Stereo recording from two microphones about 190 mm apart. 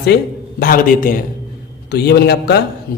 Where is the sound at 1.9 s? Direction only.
60° left (ahead or behind).